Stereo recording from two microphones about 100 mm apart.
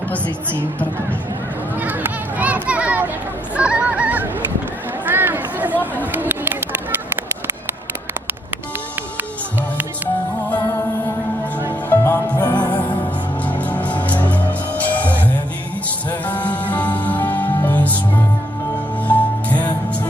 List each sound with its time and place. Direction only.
1.8 s children playing: 20° right (ahead or behind)
3.5 s honk: 10° right (ahead or behind)
5.0 s chatter: 20° right (ahead or behind)
6.1 s a sound: 20° right (ahead or behind)
11.9 s music: 25° left (ahead or behind)
12.4 s music: 45° left (ahead or behind)
13.4 s music: 15° left (ahead or behind)
19.0 s music: 15° left (ahead or behind)